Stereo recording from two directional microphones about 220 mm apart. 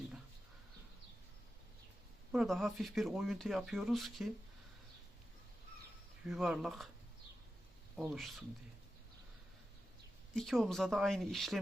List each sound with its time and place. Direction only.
2.3 s speech: centre (ahead or behind)
6.2 s speech: centre (ahead or behind)
7.9 s speech: centre (ahead or behind)
10.3 s speech: centre (ahead or behind)